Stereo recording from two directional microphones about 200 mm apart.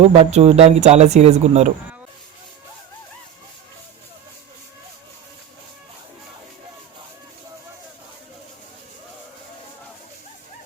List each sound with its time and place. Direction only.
0.0 s speech: 30° right (ahead or behind)